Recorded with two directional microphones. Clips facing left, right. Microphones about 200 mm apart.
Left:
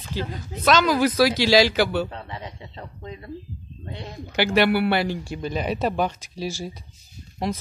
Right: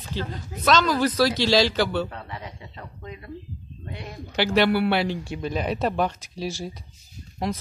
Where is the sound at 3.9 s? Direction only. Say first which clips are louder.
Left 1 dB; 25° left (ahead or behind).